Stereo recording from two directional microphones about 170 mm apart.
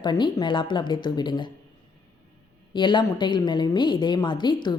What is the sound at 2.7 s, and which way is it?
A woman's voice, 25° left (ahead or behind).